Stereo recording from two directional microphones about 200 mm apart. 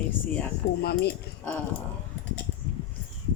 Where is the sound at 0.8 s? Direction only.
55° left (ahead or behind).